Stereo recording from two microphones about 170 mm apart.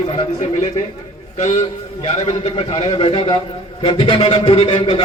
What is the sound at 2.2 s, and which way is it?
A man's voice, 35° left (ahead or behind).